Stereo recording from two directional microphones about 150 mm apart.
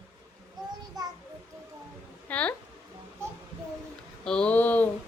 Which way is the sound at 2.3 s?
10° left (ahead or behind).